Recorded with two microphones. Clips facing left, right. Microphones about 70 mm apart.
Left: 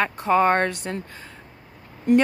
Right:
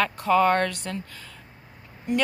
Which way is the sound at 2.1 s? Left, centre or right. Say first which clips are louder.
Left 8 dB; left.